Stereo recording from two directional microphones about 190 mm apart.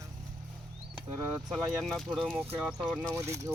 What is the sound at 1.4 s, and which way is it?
Speech, centre (ahead or behind).